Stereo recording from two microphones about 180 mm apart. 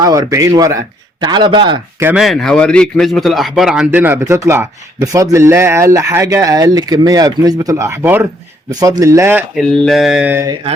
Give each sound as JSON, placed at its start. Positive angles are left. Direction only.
{"t": 0.0, "sound": "speech", "side_deg": -20}
{"t": 2.0, "sound": "a man's voice", "side_deg": -10}
{"t": 2.2, "sound": "a man's voice", "side_deg": 0}
{"t": 9.6, "sound": "a sound", "side_deg": 0}